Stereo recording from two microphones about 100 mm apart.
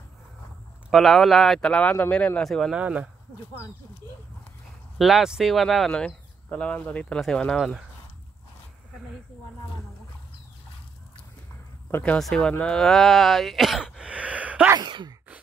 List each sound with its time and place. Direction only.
0.8 s speech: centre (ahead or behind)
2.7 s speech: 10° right (ahead or behind)
4.9 s speech: centre (ahead or behind)
12.2 s speech: 5° left (ahead or behind); by 14.7 s 15° right (ahead or behind)
14.8 s speech: 50° right (ahead or behind)